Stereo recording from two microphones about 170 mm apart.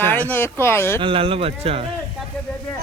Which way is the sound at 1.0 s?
30° right (ahead or behind).